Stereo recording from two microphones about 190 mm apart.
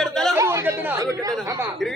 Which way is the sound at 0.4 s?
15° right (ahead or behind).